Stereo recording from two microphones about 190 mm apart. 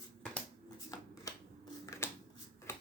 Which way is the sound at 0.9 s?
20° left (ahead or behind).